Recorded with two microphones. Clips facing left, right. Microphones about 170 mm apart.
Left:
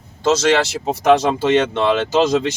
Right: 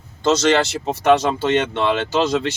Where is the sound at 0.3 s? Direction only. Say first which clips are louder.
Left 1 dB; 5° left (ahead or behind).